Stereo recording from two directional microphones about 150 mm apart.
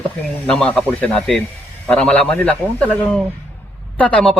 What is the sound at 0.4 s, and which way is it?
Speech, 5° left (ahead or behind).